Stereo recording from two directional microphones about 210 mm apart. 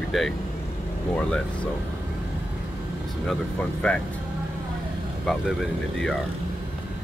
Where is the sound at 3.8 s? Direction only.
5° left (ahead or behind).